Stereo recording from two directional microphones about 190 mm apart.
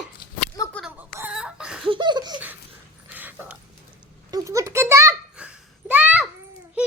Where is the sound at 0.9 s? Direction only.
10° right (ahead or behind).